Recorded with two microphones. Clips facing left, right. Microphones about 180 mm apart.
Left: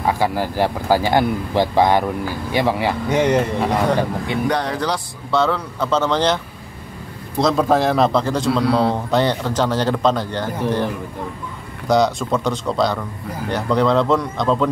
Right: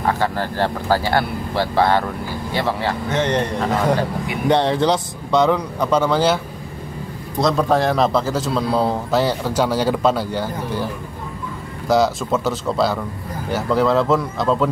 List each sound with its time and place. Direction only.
0.0 s speech: 10° left (ahead or behind)
4.5 s a man's voice: 25° right (ahead or behind); by 10.9 s 10° right (ahead or behind)
11.9 s a man's voice: 5° right (ahead or behind)